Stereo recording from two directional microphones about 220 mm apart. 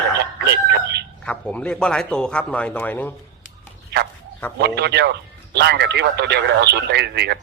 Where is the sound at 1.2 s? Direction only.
5° left (ahead or behind).